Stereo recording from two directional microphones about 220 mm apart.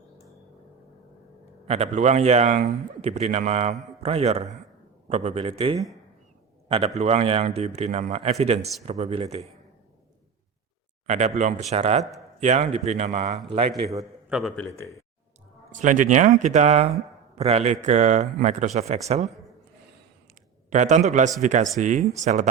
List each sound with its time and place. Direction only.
1.6 s a man's voice: 30° right (ahead or behind)
11.0 s a man's voice: 30° right (ahead or behind)
14.0 s a man's voice: centre (ahead or behind)
15.7 s speech: 35° right (ahead or behind)
20.7 s a man's voice: 35° right (ahead or behind)